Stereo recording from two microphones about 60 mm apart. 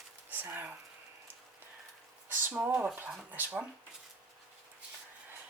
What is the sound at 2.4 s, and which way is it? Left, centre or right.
Speech, right.